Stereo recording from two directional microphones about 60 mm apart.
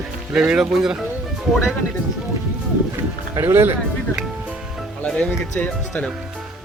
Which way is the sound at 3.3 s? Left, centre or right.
Right.